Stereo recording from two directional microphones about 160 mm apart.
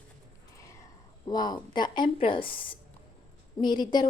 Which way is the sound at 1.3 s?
25° left (ahead or behind).